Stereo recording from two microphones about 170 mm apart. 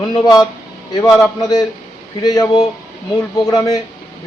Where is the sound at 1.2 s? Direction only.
20° left (ahead or behind).